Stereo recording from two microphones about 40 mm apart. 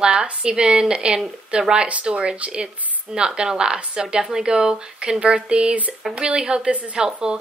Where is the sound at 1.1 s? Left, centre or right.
Centre.